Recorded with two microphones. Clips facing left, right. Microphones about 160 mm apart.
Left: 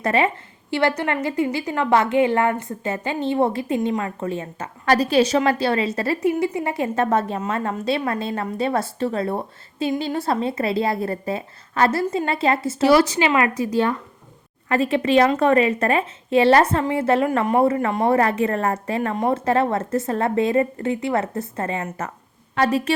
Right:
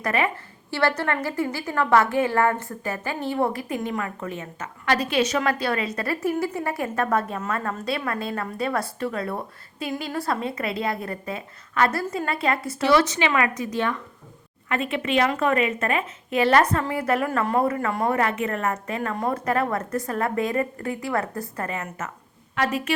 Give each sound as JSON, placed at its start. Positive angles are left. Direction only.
{"t": 0.0, "sound": "a woman's voice", "side_deg": 25}